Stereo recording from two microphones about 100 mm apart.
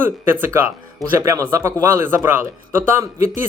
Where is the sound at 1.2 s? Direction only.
30° right (ahead or behind).